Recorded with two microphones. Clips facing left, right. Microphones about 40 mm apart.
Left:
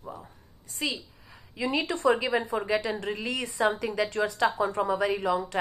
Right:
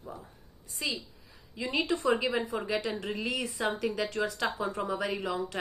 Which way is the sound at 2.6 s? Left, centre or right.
Centre.